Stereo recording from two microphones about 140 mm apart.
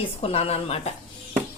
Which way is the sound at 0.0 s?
45° left (ahead or behind).